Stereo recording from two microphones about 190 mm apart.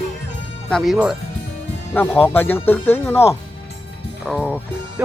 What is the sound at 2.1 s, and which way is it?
Speech, 10° left (ahead or behind).